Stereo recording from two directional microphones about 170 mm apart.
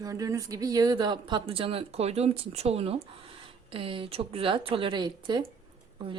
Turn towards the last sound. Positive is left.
turn(degrees=-30)  # may be behind; listen again after turning